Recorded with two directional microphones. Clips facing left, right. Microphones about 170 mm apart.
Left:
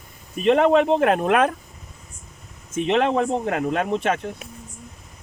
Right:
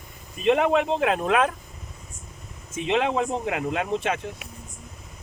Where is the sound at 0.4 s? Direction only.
55° left (ahead or behind).